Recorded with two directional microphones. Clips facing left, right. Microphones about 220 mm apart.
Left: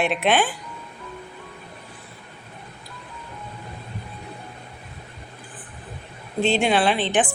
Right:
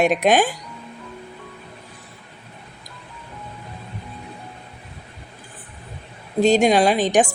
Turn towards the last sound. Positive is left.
turn(degrees=-40)  # may be behind; listen again after turning